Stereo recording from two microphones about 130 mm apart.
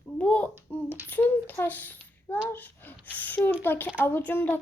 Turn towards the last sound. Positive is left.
turn(degrees=15)  # may be behind; listen again after turning